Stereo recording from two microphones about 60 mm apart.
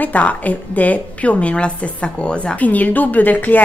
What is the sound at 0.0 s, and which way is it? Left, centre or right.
A woman's voice, left.